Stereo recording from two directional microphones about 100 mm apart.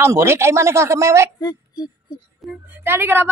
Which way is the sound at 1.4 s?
40° left (ahead or behind).